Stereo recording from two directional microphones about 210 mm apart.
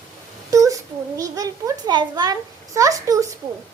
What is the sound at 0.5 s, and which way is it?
A child's voice, 15° right (ahead or behind).